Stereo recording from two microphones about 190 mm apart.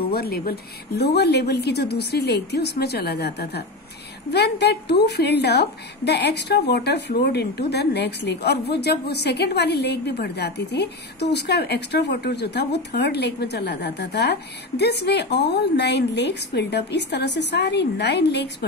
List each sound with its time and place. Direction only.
0.1 s a woman's voice: 55° left (ahead or behind)